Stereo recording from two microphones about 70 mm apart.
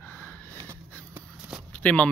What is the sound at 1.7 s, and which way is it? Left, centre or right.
Walk, centre.